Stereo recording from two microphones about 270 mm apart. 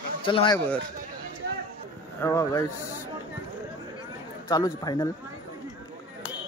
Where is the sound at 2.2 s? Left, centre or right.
Centre.